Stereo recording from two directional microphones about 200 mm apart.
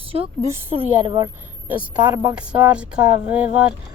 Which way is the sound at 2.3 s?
5° right (ahead or behind).